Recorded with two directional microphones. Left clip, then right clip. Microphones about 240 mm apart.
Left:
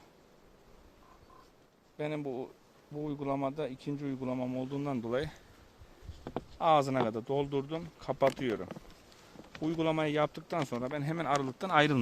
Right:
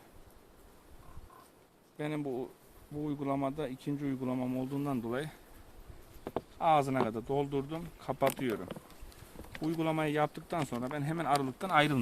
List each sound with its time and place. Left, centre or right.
2.0 s speech: left
6.6 s speech: left